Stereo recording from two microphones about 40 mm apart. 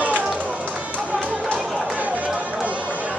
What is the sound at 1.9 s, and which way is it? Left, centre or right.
Run, right.